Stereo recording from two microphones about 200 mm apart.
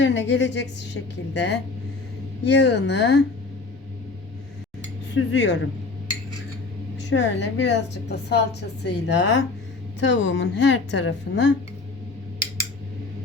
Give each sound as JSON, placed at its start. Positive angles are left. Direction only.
{"t": 0.0, "sound": "a woman's voice", "side_deg": 65}
{"t": 5.1, "sound": "a woman's voice", "side_deg": 65}
{"t": 7.1, "sound": "a woman's voice", "side_deg": 60}